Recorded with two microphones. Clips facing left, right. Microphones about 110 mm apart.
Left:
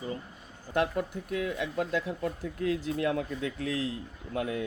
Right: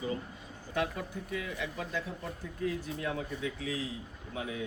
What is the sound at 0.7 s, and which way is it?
Speech, 60° left (ahead or behind).